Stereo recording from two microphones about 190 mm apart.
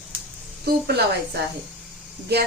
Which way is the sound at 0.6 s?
55° right (ahead or behind).